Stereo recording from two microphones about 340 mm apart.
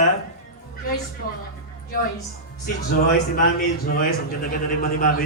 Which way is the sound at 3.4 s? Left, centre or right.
Left.